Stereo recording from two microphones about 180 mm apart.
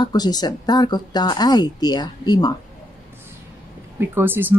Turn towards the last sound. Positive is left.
turn(degrees=-10)  # may be behind; listen again after turning